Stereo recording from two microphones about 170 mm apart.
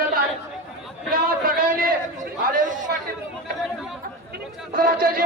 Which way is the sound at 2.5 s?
50° right (ahead or behind).